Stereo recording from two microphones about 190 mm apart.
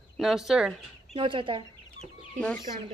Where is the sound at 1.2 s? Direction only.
25° right (ahead or behind).